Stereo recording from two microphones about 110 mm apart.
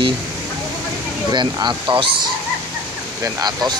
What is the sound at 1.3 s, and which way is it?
Speech, 40° right (ahead or behind).